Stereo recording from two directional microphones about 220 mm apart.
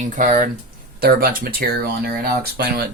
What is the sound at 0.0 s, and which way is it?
Speech, 35° right (ahead or behind).